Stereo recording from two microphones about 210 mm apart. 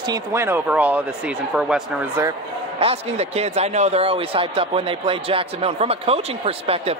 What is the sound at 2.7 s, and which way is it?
Speech, 30° right (ahead or behind).